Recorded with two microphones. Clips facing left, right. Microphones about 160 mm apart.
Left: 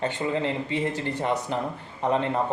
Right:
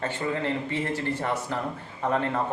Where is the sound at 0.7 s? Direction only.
15° left (ahead or behind).